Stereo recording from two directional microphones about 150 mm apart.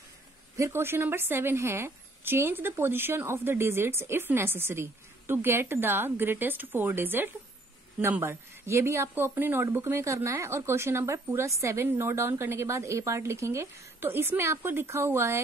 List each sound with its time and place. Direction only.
0.6 s speech: 15° right (ahead or behind)